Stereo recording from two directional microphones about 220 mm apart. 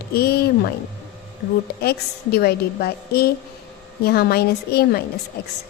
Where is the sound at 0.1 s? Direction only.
45° left (ahead or behind).